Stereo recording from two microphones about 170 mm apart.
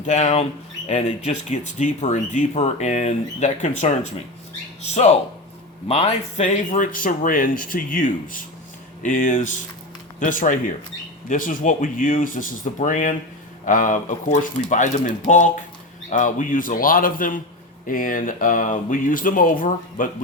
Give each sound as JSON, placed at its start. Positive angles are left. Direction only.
{"t": 0.0, "sound": "speech", "side_deg": 40}